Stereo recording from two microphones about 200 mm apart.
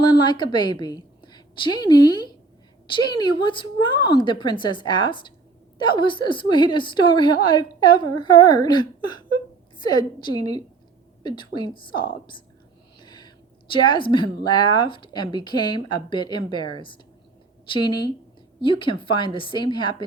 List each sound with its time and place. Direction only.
0.0 s a woman's voice: 20° left (ahead or behind)